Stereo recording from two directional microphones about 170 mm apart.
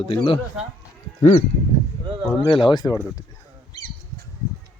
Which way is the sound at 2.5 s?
30° left (ahead or behind).